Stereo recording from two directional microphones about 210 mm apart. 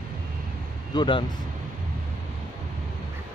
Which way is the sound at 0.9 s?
20° left (ahead or behind).